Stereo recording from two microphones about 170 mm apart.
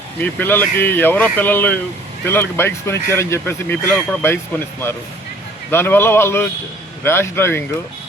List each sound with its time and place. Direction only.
0.2 s speech: 10° left (ahead or behind)
5.7 s speech: 10° left (ahead or behind)